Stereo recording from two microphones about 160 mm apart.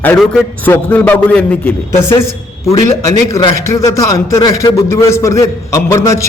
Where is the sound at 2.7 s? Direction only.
20° left (ahead or behind).